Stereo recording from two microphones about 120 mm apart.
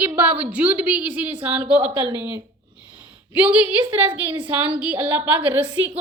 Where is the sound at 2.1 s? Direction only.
20° right (ahead or behind).